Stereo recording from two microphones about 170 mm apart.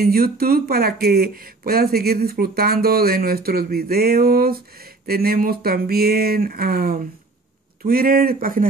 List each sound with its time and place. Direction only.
0.0 s speech: 60° right (ahead or behind)